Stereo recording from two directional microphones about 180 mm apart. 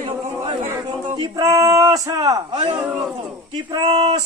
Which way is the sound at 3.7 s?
30° right (ahead or behind).